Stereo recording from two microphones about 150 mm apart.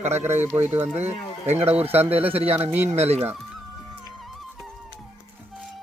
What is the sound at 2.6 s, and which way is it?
Speech, 10° right (ahead or behind).